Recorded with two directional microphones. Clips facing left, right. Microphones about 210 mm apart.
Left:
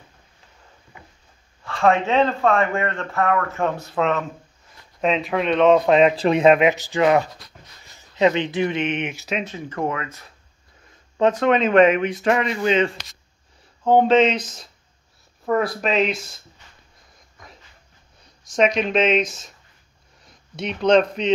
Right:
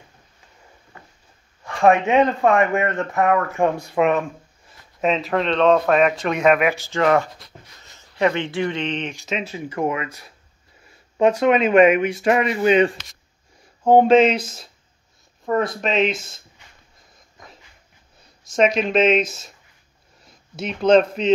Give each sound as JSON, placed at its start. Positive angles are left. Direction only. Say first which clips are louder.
{"t": 1.6, "sound": "speech", "louder": "right 2 dB", "side_deg": -15}
{"t": 5.0, "sound": "speech", "louder": "right 1 dB", "side_deg": 0}
{"t": 5.9, "sound": "speech", "louder": "left 3 dB", "side_deg": 30}
{"t": 9.4, "sound": "speech", "louder": "right 4 dB", "side_deg": -10}
{"t": 14.0, "sound": "speech", "louder": "right 2 dB", "side_deg": -10}
{"t": 15.8, "sound": "speech", "louder": "right 1 dB", "side_deg": 0}
{"t": 18.5, "sound": "speech", "louder": "right 1 dB", "side_deg": -5}
{"t": 20.5, "sound": "speech", "louder": "right 1 dB", "side_deg": -5}